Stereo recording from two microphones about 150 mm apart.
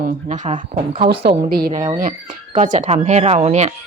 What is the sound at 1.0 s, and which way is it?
Speech, 90° right.